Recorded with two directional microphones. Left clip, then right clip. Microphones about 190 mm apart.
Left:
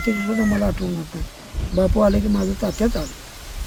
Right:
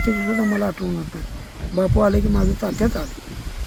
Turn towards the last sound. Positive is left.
turn(degrees=0)  # may be behind; listen again after turning